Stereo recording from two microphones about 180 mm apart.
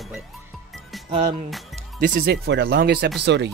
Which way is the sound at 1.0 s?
35° right (ahead or behind).